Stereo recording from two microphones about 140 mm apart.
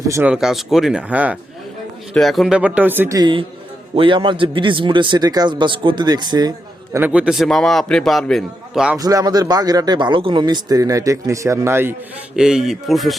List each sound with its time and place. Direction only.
0.3 s a man's voice: 5° right (ahead or behind)
2.1 s speech: centre (ahead or behind)
3.2 s a man's voice: 35° right (ahead or behind)
6.9 s a man's voice: 10° right (ahead or behind)
9.0 s speech: 25° right (ahead or behind)
12.4 s a man's voice: 5° right (ahead or behind)